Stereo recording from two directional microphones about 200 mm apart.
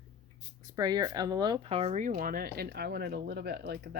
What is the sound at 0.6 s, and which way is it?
Speech, 20° right (ahead or behind).